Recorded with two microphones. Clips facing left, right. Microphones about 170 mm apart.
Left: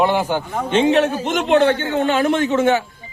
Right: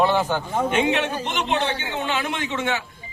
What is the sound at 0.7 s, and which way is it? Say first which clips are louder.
Speech: left 8 dB; 30° left (ahead or behind).